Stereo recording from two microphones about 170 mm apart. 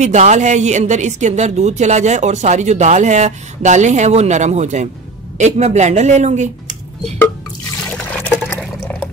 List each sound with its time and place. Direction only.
0.0 s speech: 45° right (ahead or behind)
7.9 s water: 10° left (ahead or behind)